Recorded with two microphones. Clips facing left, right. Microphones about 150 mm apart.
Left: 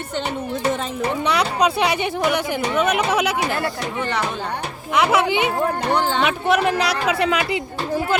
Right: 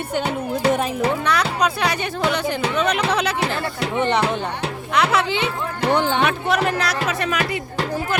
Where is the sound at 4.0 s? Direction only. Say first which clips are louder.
Right 7 dB; 20° right (ahead or behind).